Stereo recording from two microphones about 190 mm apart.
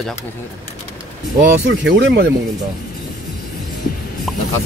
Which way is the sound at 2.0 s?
70° right (ahead or behind).